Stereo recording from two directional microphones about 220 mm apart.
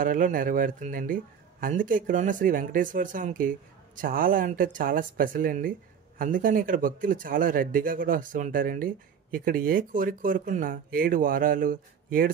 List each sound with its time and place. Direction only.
0.0 s speech: 40° right (ahead or behind)